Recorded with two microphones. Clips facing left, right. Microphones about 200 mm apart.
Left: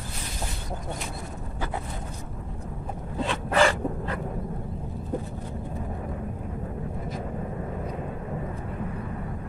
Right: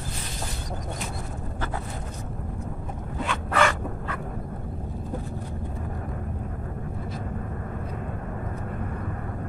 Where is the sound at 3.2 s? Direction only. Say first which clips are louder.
Left 2 dB; 30° left (ahead or behind).